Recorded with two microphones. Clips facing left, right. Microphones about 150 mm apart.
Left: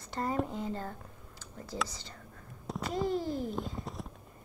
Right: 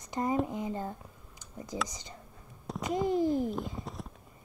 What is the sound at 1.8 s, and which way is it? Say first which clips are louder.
A child's voice: right 1 dB; 15° right (ahead or behind).